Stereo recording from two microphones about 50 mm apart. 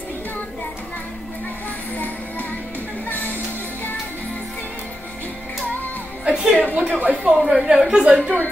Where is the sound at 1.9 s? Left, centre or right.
Left.